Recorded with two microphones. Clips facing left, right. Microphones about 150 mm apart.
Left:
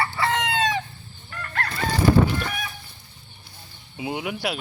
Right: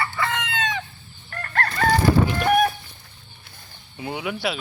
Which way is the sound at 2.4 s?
60° right (ahead or behind).